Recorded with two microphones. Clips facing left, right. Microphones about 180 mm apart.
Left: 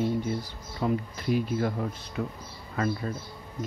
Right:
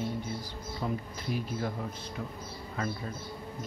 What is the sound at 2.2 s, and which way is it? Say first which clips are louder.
Speech: left 8 dB; 75° left (ahead or behind).